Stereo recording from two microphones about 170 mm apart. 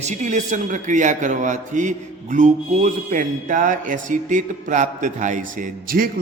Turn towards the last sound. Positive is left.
turn(degrees=-55)  # may be behind; listen again after turning